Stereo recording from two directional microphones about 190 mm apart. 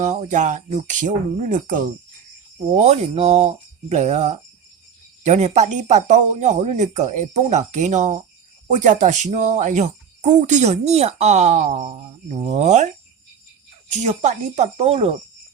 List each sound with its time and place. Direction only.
0.0 s speech: 40° right (ahead or behind)
14.0 s speech: 35° right (ahead or behind)